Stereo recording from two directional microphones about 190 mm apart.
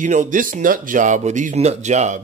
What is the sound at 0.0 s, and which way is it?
Speech, 40° right (ahead or behind).